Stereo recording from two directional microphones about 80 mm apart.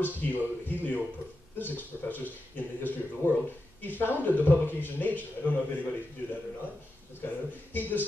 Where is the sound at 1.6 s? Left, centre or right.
Left.